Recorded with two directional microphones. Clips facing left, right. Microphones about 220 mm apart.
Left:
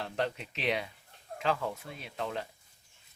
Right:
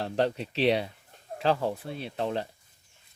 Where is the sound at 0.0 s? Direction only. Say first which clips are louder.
Right 6 dB; 35° right (ahead or behind).